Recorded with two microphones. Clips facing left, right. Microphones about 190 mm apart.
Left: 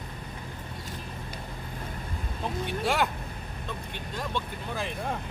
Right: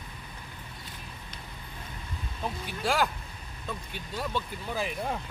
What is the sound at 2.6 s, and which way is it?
Speech, centre (ahead or behind).